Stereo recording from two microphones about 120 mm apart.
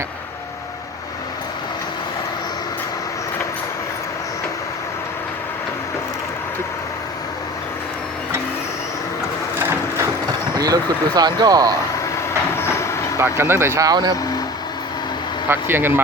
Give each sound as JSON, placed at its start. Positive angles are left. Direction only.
{"t": 9.6, "sound": "crushing", "side_deg": -20}
{"t": 10.6, "sound": "speech", "side_deg": -35}
{"t": 12.5, "sound": "train", "side_deg": 20}
{"t": 13.1, "sound": "speech", "side_deg": -20}
{"t": 15.4, "sound": "speech", "side_deg": -20}